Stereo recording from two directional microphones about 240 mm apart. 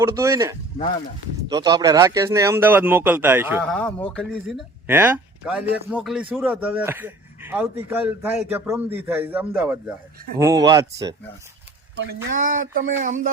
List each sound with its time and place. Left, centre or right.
0.0 s speech: centre
3.6 s speech: centre
12.3 s speech: right